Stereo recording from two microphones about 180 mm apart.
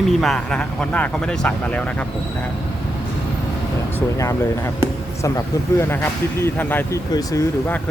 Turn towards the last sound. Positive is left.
turn(degrees=15)  # may be behind; listen again after turning